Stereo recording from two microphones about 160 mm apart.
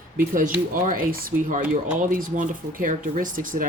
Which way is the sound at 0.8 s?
60° right (ahead or behind).